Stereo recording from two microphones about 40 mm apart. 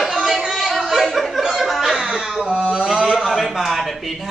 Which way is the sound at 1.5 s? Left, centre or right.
Centre.